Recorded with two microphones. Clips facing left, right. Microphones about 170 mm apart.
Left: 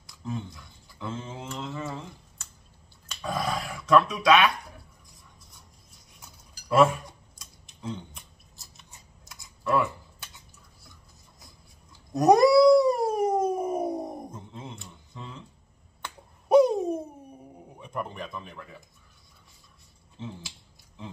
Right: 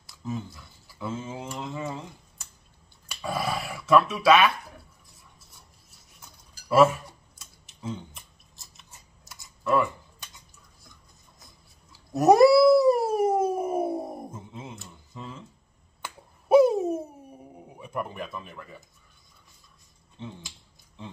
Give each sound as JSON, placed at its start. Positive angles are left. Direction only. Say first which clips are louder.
{"t": 0.0, "sound": "speech", "louder": "right 1 dB", "side_deg": -5}
{"t": 3.1, "sound": "dog", "louder": "even", "side_deg": -10}
{"t": 7.3, "sound": "scissors", "louder": "even", "side_deg": -5}
{"t": 12.1, "sound": "cat", "louder": "right 2 dB", "side_deg": -5}
{"t": 16.0, "sound": "a sound", "louder": "right 1 dB", "side_deg": -5}
{"t": 17.6, "sound": "speech", "louder": "right 2 dB", "side_deg": -5}
{"t": 20.2, "sound": "speech", "louder": "left 1 dB", "side_deg": 5}